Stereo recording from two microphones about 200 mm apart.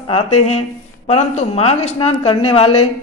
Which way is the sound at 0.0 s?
30° left (ahead or behind).